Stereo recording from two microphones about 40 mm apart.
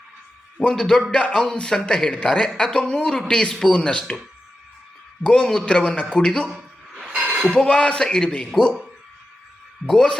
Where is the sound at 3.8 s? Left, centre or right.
Left.